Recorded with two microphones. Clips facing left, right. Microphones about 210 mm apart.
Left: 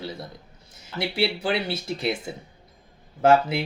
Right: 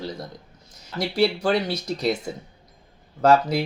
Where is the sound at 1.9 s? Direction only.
40° right (ahead or behind).